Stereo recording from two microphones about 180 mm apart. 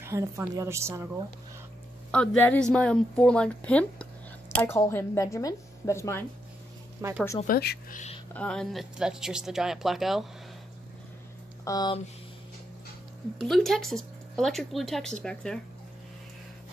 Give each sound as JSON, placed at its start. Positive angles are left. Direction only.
{"t": 0.0, "sound": "a woman's voice", "side_deg": -15}
{"t": 2.0, "sound": "a woman's voice", "side_deg": 5}
{"t": 7.0, "sound": "speech", "side_deg": -15}
{"t": 7.4, "sound": "speech", "side_deg": 60}
{"t": 8.3, "sound": "speech", "side_deg": 5}
{"t": 11.6, "sound": "speech", "side_deg": 20}
{"t": 13.4, "sound": "speech", "side_deg": 0}